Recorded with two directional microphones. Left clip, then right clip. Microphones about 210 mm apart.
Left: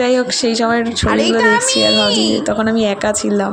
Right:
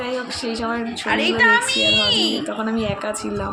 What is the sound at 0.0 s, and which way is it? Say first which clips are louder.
Speech: left 11 dB; 35° left (ahead or behind).